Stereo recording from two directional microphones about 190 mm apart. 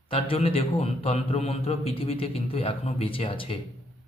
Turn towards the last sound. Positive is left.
turn(degrees=30)  # may be behind; listen again after turning